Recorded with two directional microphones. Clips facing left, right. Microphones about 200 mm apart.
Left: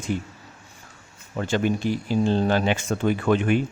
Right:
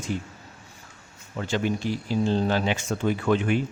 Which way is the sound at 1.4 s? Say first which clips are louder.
Left 3 dB; 50° left (ahead or behind).